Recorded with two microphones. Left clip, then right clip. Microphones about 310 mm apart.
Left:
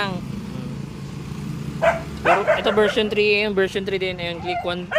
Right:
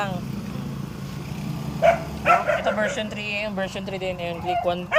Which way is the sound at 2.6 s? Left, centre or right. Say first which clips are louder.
Left 5 dB; centre.